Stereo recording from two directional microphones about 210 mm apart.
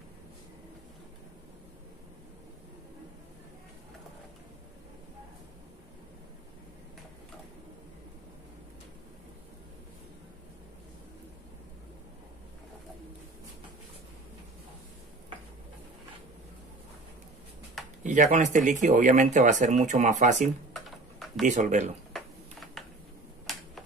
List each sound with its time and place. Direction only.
18.0 s speech: 35° right (ahead or behind)
20.7 s typing: centre (ahead or behind)
21.5 s speech: 35° right (ahead or behind)
23.4 s finger snapping: centre (ahead or behind)